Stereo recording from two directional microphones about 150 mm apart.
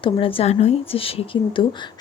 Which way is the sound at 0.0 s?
35° left (ahead or behind).